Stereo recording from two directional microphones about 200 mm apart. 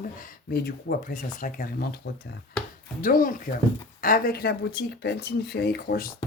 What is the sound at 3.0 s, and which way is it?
Speech, 45° left (ahead or behind).